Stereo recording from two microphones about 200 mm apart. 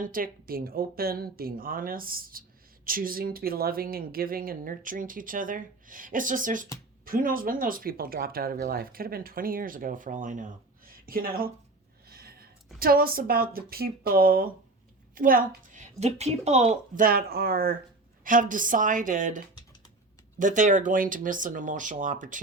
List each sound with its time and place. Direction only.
0.0 s speech: 45° right (ahead or behind)
12.0 s a sound: 50° right (ahead or behind)
12.8 s speech: 45° right (ahead or behind)
20.4 s speech: 40° right (ahead or behind)